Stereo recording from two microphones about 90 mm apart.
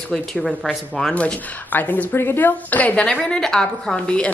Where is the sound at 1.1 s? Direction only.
15° left (ahead or behind).